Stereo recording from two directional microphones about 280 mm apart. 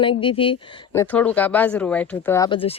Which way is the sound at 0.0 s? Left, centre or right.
Centre.